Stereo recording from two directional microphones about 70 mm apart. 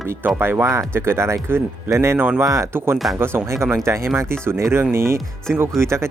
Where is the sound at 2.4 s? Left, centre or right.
Right.